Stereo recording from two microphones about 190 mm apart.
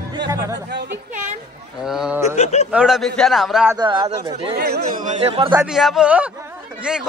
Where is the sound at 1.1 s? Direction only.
40° right (ahead or behind).